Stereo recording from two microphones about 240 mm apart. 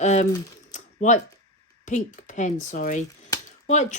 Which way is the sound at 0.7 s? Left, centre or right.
Left.